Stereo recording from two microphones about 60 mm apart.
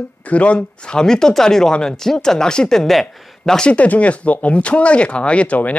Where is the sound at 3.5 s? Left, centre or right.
Centre.